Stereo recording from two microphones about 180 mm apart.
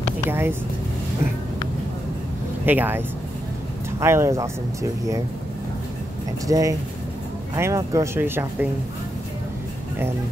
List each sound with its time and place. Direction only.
0.3 s speech: 10° right (ahead or behind)
2.6 s speech: 10° right (ahead or behind)
4.0 s speech: 15° right (ahead or behind)
6.4 s speech: 20° right (ahead or behind)